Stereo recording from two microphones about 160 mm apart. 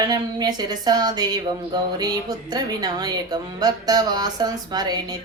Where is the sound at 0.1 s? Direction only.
25° right (ahead or behind).